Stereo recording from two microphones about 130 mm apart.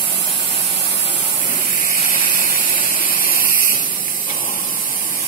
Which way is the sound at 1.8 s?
85° left.